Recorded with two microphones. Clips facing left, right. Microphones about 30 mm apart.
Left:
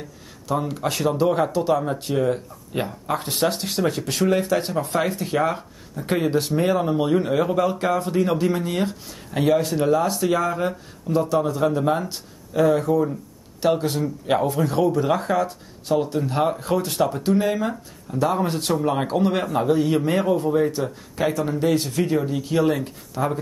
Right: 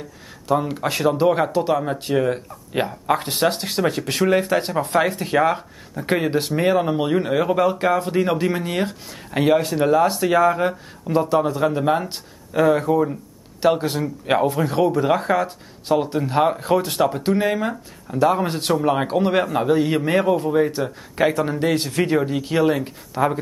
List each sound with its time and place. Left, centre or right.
0.5 s speech: centre
21.7 s speech: right